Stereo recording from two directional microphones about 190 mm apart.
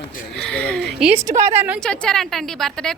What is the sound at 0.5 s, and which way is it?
Speech, 5° left (ahead or behind).